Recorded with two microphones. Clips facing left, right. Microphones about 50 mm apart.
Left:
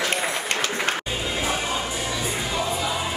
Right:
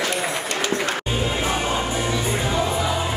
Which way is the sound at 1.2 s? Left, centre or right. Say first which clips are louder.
Right 3 dB; right.